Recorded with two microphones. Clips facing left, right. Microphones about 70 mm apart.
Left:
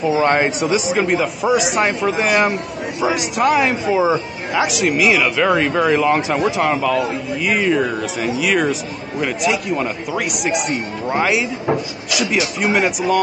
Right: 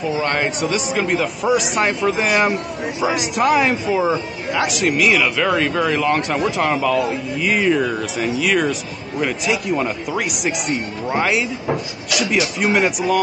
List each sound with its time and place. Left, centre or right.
0.1 s speech: centre